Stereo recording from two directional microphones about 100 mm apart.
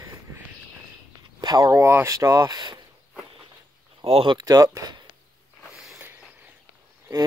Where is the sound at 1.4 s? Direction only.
40° right (ahead or behind).